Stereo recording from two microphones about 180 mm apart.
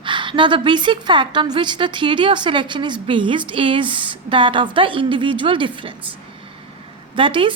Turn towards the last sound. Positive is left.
turn(degrees=-30)  # may be behind; listen again after turning